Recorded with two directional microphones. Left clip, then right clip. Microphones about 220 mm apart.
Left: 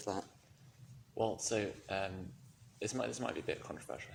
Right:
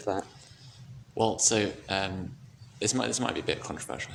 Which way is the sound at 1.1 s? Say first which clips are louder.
Right 10 dB; 40° right (ahead or behind).